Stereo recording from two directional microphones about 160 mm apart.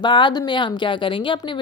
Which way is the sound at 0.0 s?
30° left (ahead or behind).